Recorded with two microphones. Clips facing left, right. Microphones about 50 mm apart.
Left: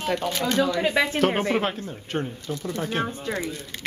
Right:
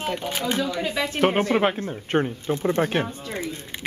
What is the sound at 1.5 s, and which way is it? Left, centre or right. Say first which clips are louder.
Speech: right 3 dB; right.